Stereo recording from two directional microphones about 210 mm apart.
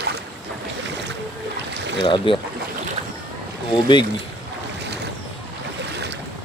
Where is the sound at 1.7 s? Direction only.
55° right (ahead or behind).